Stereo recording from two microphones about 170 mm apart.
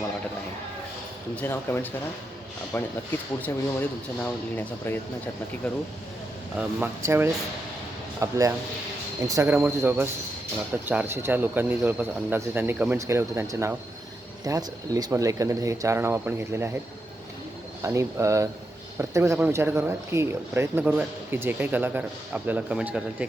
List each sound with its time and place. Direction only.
1.4 s speech: 10° left (ahead or behind)
6.6 s speech: 10° right (ahead or behind)
17.8 s speech: 15° right (ahead or behind)